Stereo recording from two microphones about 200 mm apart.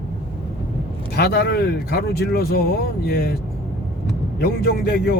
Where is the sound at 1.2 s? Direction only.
55° left (ahead or behind).